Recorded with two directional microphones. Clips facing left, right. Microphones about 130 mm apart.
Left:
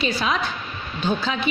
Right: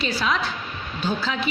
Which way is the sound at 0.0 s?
20° left (ahead or behind).